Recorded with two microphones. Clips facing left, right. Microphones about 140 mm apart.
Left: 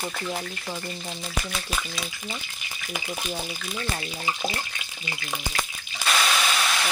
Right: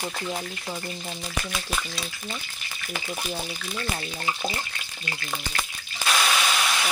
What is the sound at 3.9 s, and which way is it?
Speech, 5° left (ahead or behind).